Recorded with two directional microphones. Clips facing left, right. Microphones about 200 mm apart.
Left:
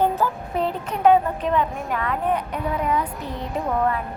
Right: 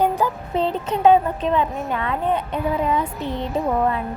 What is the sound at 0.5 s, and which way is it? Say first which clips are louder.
A woman's voice: right 3 dB; 25° right (ahead or behind).